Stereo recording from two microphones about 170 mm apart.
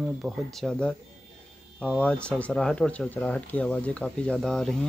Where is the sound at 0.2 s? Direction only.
5° left (ahead or behind).